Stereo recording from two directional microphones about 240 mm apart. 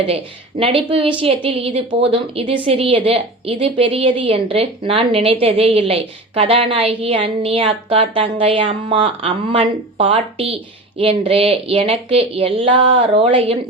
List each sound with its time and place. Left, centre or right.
0.6 s speech: right